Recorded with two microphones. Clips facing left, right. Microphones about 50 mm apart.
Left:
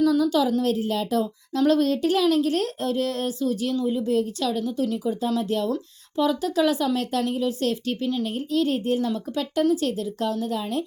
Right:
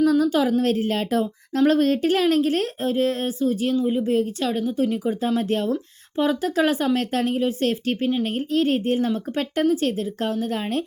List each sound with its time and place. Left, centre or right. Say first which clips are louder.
0.0 s a woman's voice: right 2 dB; right